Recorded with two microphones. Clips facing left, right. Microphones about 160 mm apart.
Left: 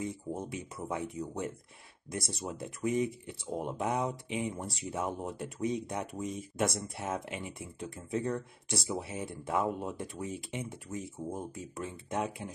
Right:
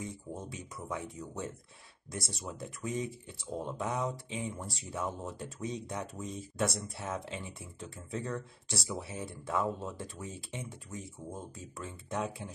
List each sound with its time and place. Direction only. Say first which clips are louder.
0.0 s speech: left 4 dB; 20° left (ahead or behind)